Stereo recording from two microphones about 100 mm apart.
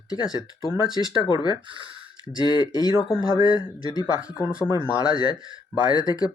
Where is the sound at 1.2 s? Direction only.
50° left (ahead or behind).